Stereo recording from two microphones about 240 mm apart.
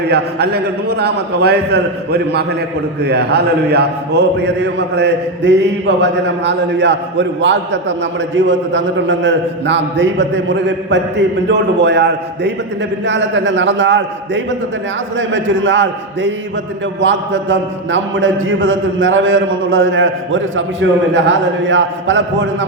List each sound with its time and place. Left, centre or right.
0.0 s a man's voice: right
17.0 s a sound: right
21.1 s a man's voice: right